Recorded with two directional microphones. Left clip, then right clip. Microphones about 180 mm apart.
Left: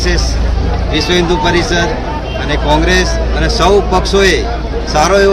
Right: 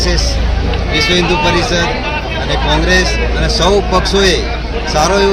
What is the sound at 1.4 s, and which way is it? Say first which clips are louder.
A man's voice: even; centre (ahead or behind).